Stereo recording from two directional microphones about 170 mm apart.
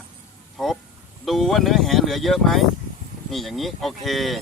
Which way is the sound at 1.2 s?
Centre (ahead or behind).